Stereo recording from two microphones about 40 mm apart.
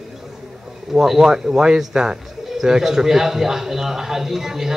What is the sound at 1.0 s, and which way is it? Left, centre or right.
Speech, centre.